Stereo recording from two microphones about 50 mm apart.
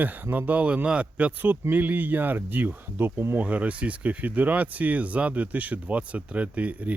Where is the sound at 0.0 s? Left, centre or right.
Right.